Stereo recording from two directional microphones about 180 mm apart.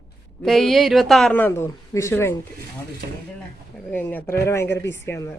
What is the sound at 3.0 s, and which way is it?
Speech, 65° right (ahead or behind).